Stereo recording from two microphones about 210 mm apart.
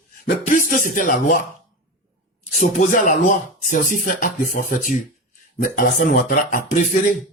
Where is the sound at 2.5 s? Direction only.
40° left (ahead or behind).